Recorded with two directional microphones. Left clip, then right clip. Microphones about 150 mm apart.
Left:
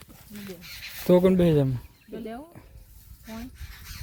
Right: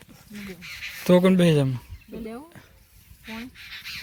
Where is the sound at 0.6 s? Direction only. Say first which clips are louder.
Right 7 dB; 45° left (ahead or behind).